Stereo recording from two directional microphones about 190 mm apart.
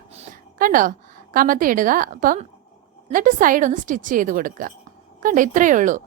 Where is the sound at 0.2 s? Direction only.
45° right (ahead or behind).